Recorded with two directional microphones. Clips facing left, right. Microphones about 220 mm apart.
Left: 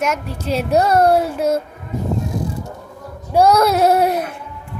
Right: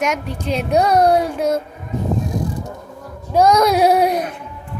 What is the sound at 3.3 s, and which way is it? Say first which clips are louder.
Speech: even; 10° left (ahead or behind).